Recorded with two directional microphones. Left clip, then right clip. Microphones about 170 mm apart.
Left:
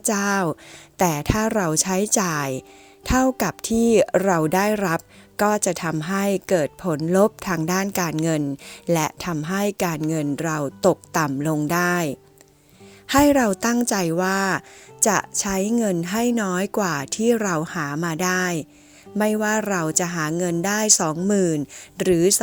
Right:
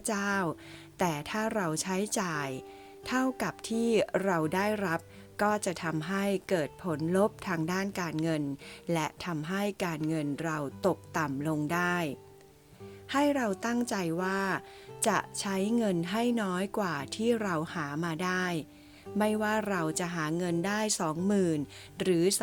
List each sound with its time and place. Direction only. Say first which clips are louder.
0.0 s a woman's voice: left 9 dB; 45° left (ahead or behind)